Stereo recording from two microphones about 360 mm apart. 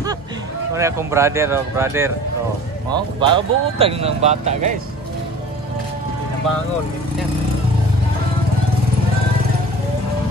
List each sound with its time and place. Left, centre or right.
0.7 s speech: centre